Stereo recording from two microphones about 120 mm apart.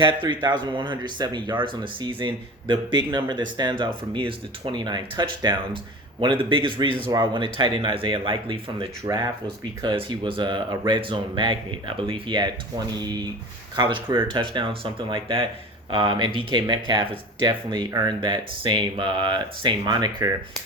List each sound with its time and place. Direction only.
0.0 s speech: 40° right (ahead or behind)
9.0 s speech: 30° right (ahead or behind)
9.8 s speech: 45° right (ahead or behind)